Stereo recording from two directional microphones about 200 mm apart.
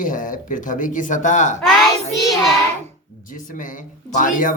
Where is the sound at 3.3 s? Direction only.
40° left (ahead or behind).